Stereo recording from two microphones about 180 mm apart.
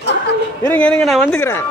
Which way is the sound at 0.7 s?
5° left (ahead or behind).